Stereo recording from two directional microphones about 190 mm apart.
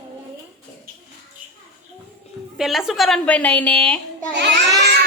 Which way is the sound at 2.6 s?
Centre (ahead or behind).